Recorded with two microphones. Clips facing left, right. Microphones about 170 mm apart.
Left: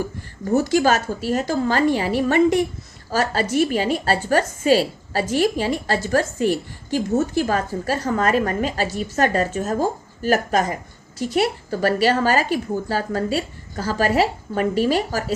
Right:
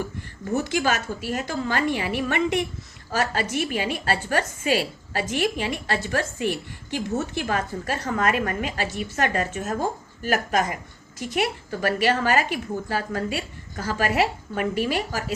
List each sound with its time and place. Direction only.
0.0 s a woman's voice: 40° left (ahead or behind)